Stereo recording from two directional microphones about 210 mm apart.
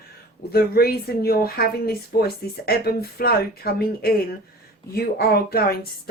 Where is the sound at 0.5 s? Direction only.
45° left (ahead or behind).